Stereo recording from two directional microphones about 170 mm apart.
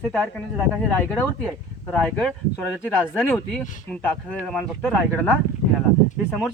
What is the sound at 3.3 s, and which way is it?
Speech, 10° left (ahead or behind).